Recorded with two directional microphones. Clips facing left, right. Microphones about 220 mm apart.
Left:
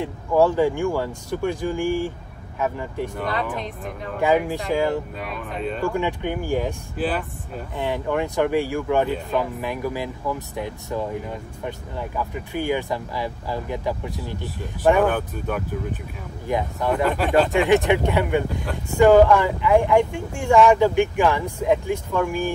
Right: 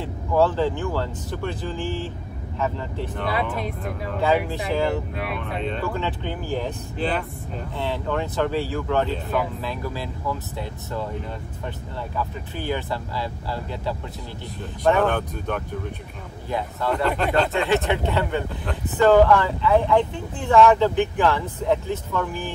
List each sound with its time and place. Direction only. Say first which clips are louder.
0.0 s speech: left 2 dB; 15° left (ahead or behind)
3.5 s speech: right 2 dB; 10° right (ahead or behind)
4.2 s speech: left 2 dB; 10° left (ahead or behind)
12.2 s speech: left 4 dB; 15° left (ahead or behind)